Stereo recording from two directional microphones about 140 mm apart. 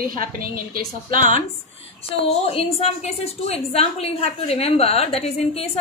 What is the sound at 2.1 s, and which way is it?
A woman's voice, 45° left (ahead or behind).